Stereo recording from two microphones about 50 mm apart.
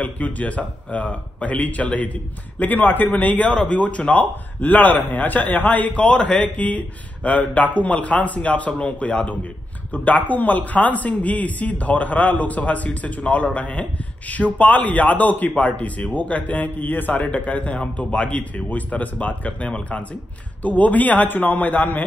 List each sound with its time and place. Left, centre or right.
0.0 s a man's voice: left